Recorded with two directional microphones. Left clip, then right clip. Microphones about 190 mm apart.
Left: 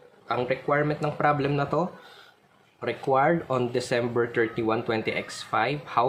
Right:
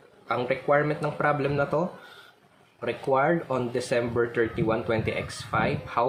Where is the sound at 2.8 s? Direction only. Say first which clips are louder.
Left 1 dB; 25° left (ahead or behind).